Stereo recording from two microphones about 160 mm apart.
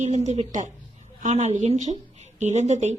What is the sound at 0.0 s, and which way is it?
A woman's voice, 45° right (ahead or behind).